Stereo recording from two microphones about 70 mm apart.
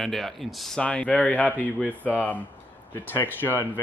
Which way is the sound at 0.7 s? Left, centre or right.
Centre.